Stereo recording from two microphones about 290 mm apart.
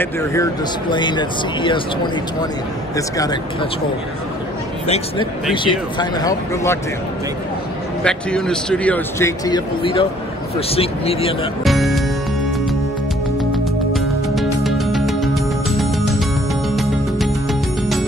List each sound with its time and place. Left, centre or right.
0.0 s speech: centre
4.8 s speech: centre
8.0 s speech: centre
11.6 s music: centre
13.9 s music: centre